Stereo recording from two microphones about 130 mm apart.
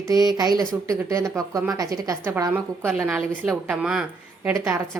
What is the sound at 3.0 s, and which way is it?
A woman's voice, centre (ahead or behind).